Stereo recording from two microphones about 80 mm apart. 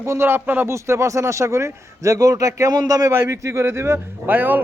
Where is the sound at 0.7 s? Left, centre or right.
Right.